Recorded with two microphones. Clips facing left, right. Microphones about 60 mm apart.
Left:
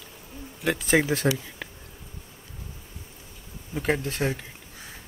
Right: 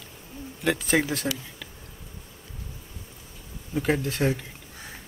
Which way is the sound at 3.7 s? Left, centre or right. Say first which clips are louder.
Right 1 dB; centre.